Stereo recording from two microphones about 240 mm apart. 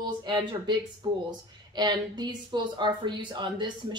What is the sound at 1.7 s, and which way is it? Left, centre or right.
A woman's voice, centre.